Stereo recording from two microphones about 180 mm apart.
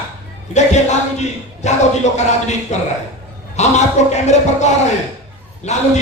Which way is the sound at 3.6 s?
40° left (ahead or behind).